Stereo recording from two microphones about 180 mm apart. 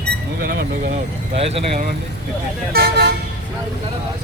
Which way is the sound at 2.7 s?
60° right (ahead or behind).